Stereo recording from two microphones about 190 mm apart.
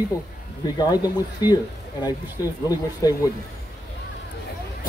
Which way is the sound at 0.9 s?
20° left (ahead or behind).